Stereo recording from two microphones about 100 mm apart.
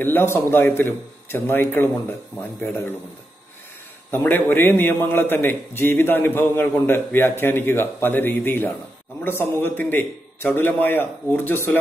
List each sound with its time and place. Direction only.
0.0 s a man's voice: 20° left (ahead or behind)
4.1 s a man's voice: 20° left (ahead or behind)